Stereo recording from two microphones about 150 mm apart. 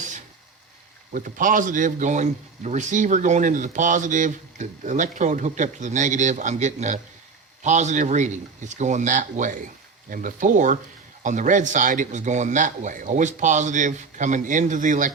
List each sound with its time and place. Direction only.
1.1 s a man's voice: 60° right (ahead or behind)